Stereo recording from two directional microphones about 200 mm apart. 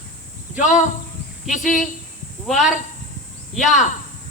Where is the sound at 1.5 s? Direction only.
40° left (ahead or behind).